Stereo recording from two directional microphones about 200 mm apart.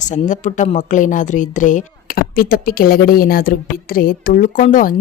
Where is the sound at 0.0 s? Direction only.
35° left (ahead or behind).